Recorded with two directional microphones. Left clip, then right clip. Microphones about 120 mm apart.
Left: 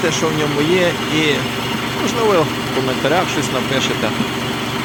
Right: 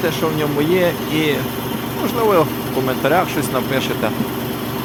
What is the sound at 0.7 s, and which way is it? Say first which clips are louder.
Speech: left 1 dB; 5° right (ahead or behind).